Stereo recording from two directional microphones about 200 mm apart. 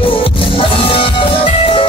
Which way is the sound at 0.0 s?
25° left (ahead or behind).